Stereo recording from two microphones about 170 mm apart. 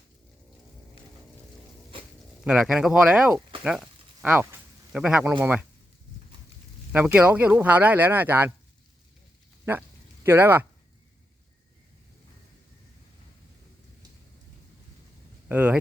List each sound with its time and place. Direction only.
2.4 s speech: 5° right (ahead or behind)
3.6 s a sound: 5° right (ahead or behind)
5.4 s speech: 10° right (ahead or behind)
6.9 s speech: 10° right (ahead or behind)
10.2 s speech: 10° right (ahead or behind)
15.4 s speech: 10° right (ahead or behind)